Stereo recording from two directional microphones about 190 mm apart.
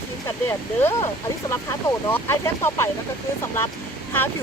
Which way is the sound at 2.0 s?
15° left (ahead or behind).